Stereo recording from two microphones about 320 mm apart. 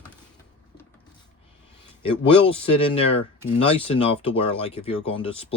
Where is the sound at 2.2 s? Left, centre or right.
Centre.